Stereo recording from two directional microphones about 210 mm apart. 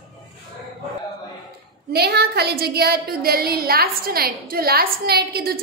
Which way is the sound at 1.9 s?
50° right (ahead or behind).